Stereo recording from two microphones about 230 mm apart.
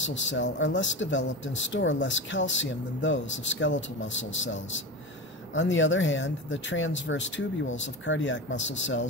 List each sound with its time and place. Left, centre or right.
0.0 s speech: left